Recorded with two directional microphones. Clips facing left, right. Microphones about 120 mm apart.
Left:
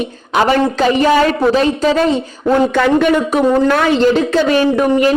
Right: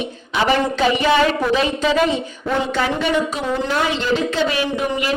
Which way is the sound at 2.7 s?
55° left (ahead or behind).